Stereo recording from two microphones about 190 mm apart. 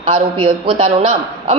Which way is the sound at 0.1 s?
25° right (ahead or behind).